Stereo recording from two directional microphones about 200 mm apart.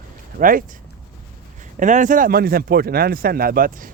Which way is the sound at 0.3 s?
45° right (ahead or behind).